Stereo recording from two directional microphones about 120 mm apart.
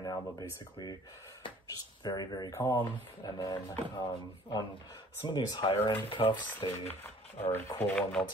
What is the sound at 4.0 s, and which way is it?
Speech, 35° left (ahead or behind).